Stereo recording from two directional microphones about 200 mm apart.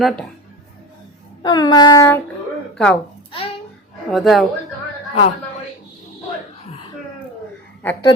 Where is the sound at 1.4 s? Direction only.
20° left (ahead or behind).